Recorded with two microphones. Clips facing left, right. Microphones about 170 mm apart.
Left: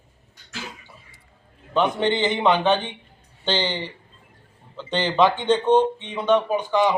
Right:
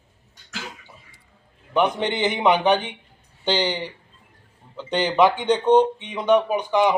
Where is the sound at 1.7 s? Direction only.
15° right (ahead or behind).